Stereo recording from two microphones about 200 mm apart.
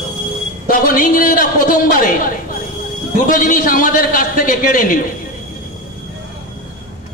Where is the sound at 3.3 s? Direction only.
40° left (ahead or behind).